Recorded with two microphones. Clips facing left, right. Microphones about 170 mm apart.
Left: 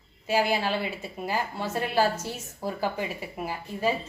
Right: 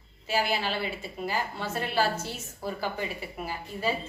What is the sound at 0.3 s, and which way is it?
A woman's voice, 15° left (ahead or behind).